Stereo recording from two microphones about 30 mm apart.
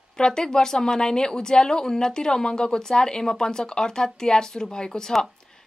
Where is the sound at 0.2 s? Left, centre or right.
Left.